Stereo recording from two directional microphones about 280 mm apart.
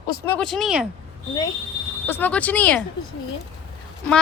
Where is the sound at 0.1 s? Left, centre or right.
Centre.